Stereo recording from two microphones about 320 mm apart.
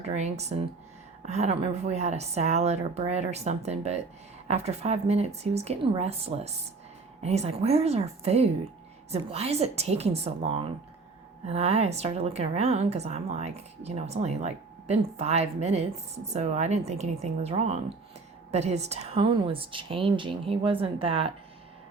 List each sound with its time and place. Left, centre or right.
0.2 s a woman's voice: right